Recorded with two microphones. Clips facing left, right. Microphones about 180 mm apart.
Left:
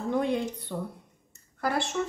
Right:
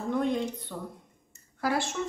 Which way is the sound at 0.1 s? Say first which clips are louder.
Even; 10° left (ahead or behind).